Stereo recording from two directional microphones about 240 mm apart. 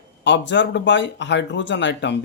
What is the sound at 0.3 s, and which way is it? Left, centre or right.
Speech, left.